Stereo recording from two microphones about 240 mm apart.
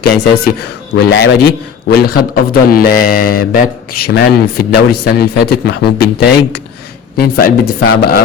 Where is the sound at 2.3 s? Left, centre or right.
Left.